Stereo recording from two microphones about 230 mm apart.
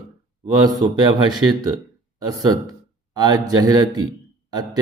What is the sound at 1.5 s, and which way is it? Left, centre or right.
A man's voice, centre.